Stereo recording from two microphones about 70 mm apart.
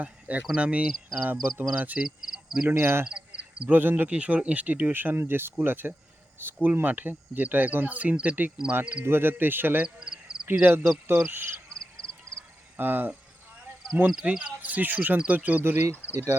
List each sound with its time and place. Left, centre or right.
0.0 s speech: right
2.0 s cricket: centre
2.6 s cricket: right
3.1 s frog: centre
3.8 s speech: right
9.0 s speech: right
9.8 s a sound: centre
10.4 s speech: right
11.0 s cricket: right
11.7 s a sound: centre
12.7 s mains hum: right
14.3 s speech: centre
15.6 s cricket: right